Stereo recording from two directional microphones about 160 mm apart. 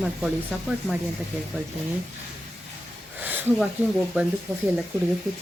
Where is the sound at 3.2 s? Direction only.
10° right (ahead or behind).